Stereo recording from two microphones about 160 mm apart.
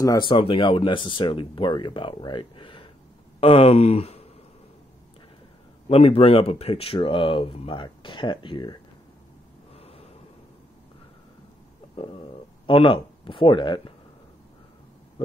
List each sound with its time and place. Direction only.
0.0 s speech: 25° left (ahead or behind)
5.9 s speech: 35° left (ahead or behind)
9.8 s gasp: 40° left (ahead or behind)
12.0 s speech: 35° left (ahead or behind)
15.2 s a sound: 30° left (ahead or behind)